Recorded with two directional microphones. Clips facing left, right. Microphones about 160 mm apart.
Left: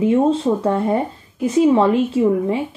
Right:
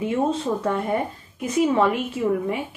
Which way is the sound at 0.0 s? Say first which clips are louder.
Left 7 dB; 25° left (ahead or behind).